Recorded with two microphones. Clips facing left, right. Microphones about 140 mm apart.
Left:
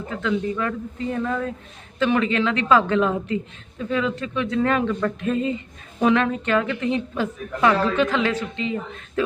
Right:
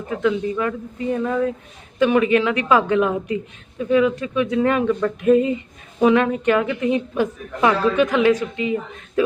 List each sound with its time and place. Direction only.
0.1 s a woman's voice: 15° right (ahead or behind)